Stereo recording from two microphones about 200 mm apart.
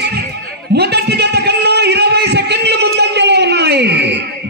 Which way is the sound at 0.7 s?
55° right (ahead or behind).